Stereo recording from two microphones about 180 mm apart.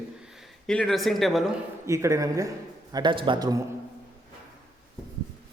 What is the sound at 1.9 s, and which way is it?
A man's voice, 15° right (ahead or behind).